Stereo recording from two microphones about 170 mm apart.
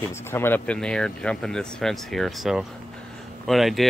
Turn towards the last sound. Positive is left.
turn(degrees=0)  # may be behind; listen again after turning